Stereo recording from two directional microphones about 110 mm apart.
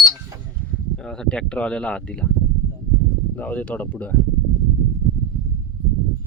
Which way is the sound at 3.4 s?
15° left (ahead or behind).